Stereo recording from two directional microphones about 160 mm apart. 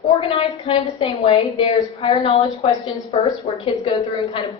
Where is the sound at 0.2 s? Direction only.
35° left (ahead or behind).